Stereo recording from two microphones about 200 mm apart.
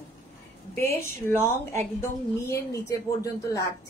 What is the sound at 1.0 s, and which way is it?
A woman's voice, 10° left (ahead or behind).